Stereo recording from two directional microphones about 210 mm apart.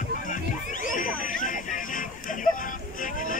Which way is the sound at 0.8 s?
40° left (ahead or behind).